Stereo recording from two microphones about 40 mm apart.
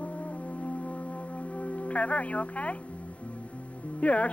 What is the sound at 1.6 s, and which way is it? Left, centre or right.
Speech, left.